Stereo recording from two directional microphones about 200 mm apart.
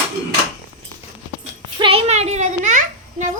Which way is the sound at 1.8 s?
30° right (ahead or behind).